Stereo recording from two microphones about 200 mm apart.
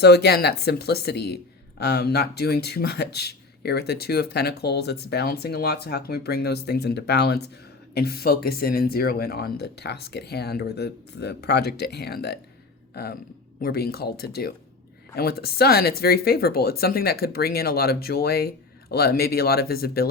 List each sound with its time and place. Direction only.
0.0 s speech: 55° left (ahead or behind)